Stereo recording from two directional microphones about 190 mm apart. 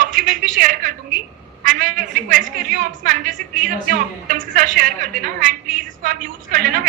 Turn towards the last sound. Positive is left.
turn(degrees=-50)  # may be behind; listen again after turning